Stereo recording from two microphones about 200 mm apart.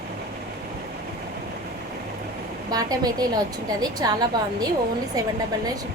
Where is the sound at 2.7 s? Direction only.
20° right (ahead or behind).